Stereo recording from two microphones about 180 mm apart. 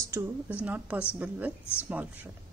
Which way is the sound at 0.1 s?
10° right (ahead or behind).